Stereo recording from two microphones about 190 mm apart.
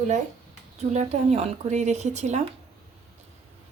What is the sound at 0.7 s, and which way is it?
Speech, 35° right (ahead or behind).